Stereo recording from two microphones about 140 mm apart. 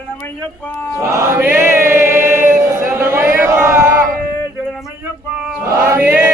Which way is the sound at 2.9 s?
15° right (ahead or behind).